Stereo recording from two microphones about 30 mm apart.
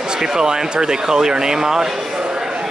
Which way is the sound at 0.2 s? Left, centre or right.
Right.